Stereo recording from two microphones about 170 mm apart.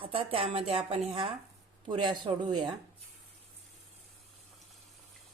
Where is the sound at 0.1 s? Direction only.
30° right (ahead or behind).